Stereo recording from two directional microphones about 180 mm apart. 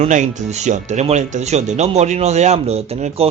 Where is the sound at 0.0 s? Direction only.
40° right (ahead or behind).